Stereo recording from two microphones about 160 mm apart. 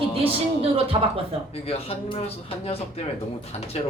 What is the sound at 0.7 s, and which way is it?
Speech, 35° right (ahead or behind).